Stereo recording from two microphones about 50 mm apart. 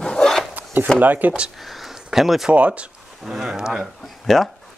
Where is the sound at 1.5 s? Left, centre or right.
Centre.